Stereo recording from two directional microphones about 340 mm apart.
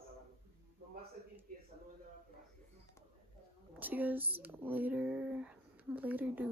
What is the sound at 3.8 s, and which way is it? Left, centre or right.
Speech, centre.